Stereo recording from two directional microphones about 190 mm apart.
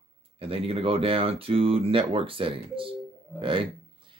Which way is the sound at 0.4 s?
30° right (ahead or behind).